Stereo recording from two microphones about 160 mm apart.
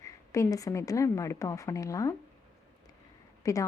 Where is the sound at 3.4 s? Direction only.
20° left (ahead or behind).